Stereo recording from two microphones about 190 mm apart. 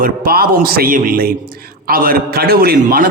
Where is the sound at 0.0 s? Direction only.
50° right (ahead or behind).